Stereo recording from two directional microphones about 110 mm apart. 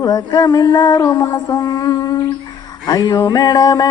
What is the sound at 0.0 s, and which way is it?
Mantra, 35° left (ahead or behind).